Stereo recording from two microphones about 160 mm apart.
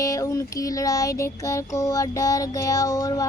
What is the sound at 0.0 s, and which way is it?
Child singing, 20° left (ahead or behind).